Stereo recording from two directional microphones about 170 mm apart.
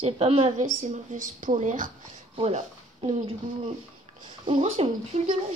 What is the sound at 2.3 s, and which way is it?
Speech, 35° right (ahead or behind).